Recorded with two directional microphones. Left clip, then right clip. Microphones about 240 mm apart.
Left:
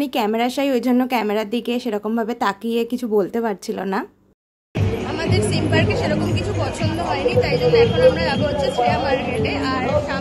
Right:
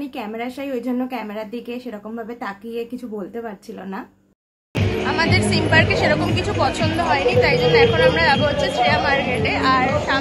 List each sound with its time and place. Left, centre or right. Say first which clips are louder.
0.0 s a woman's voice: left 8 dB; left
5.1 s speech: right 3 dB; centre